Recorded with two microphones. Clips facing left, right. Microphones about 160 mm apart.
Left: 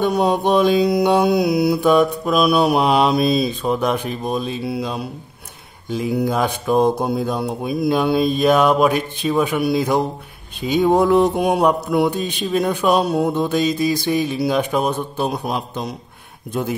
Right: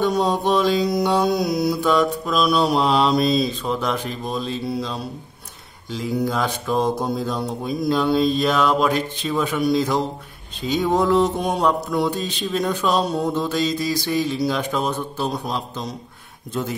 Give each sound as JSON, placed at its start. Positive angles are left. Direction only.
{"t": 0.0, "sound": "mantra", "side_deg": 15}